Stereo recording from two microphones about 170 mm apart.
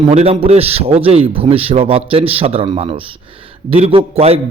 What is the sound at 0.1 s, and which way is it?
Speech, 40° right (ahead or behind).